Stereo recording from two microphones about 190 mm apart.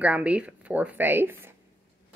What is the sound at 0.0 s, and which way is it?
Speech, 5° right (ahead or behind).